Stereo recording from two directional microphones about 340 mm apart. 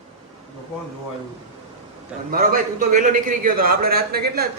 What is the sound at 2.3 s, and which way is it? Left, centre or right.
A man's voice, right.